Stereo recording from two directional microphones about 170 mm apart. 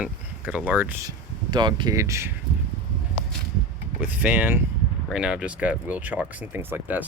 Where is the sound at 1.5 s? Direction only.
25° right (ahead or behind).